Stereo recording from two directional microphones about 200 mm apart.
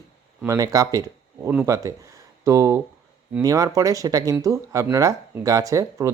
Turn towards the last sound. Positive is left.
turn(degrees=-15)  # may be behind; listen again after turning